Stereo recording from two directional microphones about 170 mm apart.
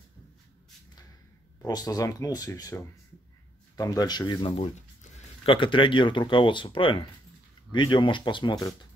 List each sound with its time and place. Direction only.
1.7 s speech: 20° left (ahead or behind)